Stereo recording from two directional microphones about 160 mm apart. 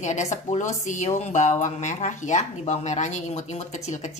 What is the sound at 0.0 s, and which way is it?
Speech, 45° left (ahead or behind).